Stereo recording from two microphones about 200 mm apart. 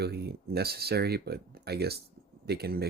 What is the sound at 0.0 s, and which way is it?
Speech, 55° right (ahead or behind).